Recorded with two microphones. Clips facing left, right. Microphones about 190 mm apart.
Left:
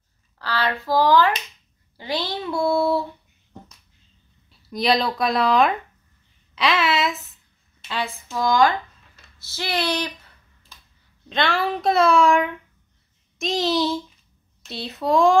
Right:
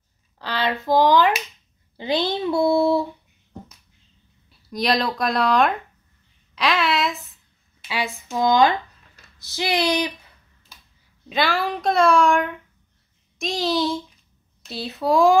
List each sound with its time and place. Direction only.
0.4 s speech: 20° right (ahead or behind)
4.5 s speech: centre (ahead or behind)
7.9 s speech: 10° right (ahead or behind)
10.7 s a sound: 10° right (ahead or behind)
11.2 s a child's voice: 5° right (ahead or behind)